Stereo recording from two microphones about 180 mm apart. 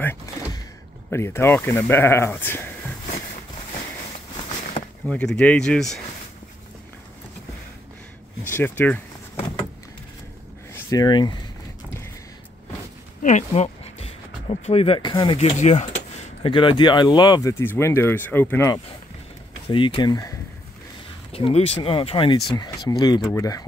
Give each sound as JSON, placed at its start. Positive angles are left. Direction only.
{"t": 1.1, "sound": "speech", "side_deg": 15}
{"t": 5.0, "sound": "speech", "side_deg": 5}
{"t": 8.5, "sound": "speech", "side_deg": 10}
{"t": 10.7, "sound": "speech", "side_deg": 20}
{"t": 13.2, "sound": "speech", "side_deg": 40}
{"t": 15.3, "sound": "speech", "side_deg": 40}
{"t": 16.4, "sound": "speech", "side_deg": 30}
{"t": 19.7, "sound": "speech", "side_deg": 30}
{"t": 21.3, "sound": "speech", "side_deg": 30}